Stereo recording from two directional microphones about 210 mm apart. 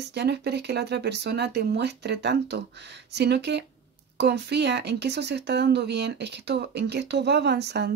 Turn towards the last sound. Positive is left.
turn(degrees=-50)  # may be behind; listen again after turning